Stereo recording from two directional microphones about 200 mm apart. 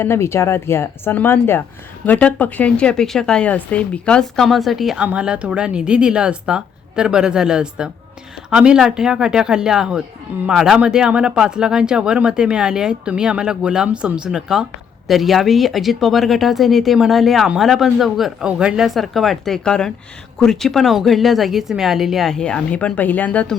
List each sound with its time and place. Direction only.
0.0 s speech: 15° left (ahead or behind)